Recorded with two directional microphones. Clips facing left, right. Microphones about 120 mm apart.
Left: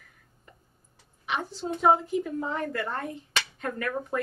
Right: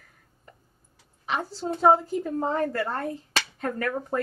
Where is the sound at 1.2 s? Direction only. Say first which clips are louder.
Right 2 dB; 35° right (ahead or behind).